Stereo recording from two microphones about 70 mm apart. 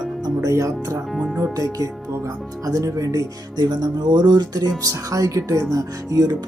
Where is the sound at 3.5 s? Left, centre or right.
Right.